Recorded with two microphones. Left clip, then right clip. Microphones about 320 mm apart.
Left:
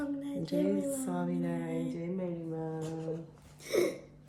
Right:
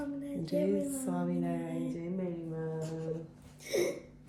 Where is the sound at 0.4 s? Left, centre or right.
Centre.